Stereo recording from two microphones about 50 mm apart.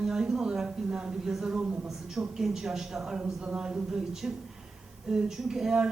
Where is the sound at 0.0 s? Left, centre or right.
Centre.